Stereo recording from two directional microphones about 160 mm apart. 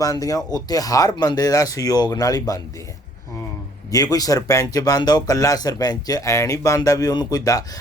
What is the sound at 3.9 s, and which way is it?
Speech, 25° left (ahead or behind).